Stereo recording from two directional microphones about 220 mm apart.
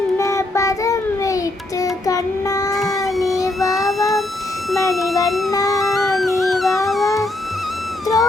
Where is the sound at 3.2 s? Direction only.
15° left (ahead or behind).